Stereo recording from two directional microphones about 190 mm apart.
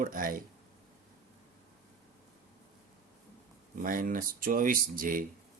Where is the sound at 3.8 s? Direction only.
45° right (ahead or behind).